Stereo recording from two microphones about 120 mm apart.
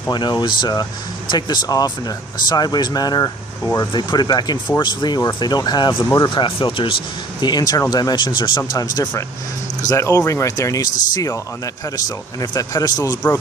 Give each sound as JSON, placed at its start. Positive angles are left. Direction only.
{"t": 0.1, "sound": "speech", "side_deg": 40}
{"t": 3.9, "sound": "speech", "side_deg": 35}